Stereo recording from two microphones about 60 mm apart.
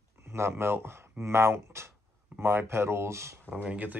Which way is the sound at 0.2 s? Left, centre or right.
Right.